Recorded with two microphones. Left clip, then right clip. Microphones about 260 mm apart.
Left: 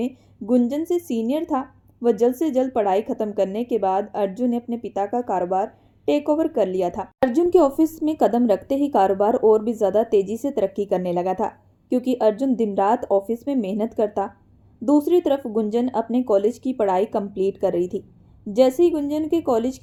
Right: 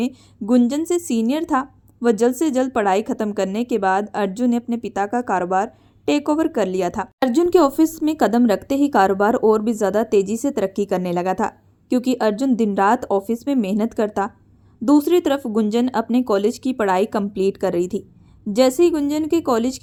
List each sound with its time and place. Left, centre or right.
0.0 s a woman's voice: right